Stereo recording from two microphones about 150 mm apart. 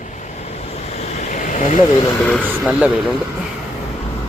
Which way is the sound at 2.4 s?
10° right (ahead or behind).